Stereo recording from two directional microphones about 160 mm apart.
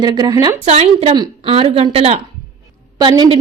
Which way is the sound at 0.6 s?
40° right (ahead or behind).